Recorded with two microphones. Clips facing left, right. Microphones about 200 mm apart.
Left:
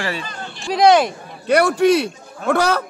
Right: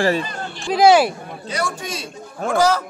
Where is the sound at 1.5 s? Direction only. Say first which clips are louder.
Left 13 dB; 65° left (ahead or behind).